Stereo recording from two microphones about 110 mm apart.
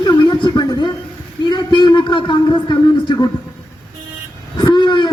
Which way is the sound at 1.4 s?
45° left (ahead or behind).